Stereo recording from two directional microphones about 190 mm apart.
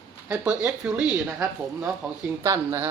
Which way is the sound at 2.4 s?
15° right (ahead or behind).